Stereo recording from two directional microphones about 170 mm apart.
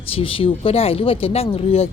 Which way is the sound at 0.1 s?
35° left (ahead or behind).